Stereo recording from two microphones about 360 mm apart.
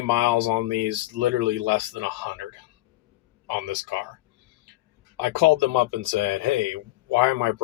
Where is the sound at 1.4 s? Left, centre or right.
Right.